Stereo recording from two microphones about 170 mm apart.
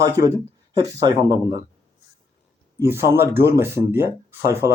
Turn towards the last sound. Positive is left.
turn(degrees=-15)  # may be behind; listen again after turning